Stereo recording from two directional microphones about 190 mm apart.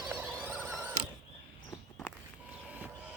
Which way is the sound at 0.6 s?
15° right (ahead or behind).